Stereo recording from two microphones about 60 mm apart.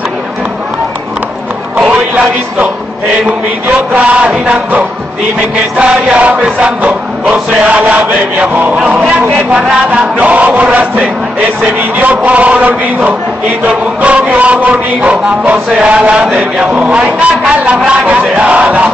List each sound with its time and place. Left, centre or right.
3.9 s chant: right
9.5 s a man's voice: centre
9.9 s chant: right